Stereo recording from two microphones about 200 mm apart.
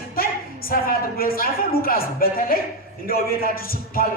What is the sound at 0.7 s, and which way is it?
A woman's voice, 45° left (ahead or behind).